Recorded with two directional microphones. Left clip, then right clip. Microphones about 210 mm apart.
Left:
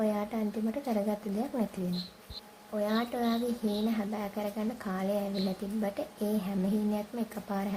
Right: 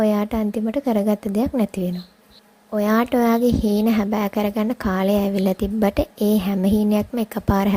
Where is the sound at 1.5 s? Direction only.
30° right (ahead or behind).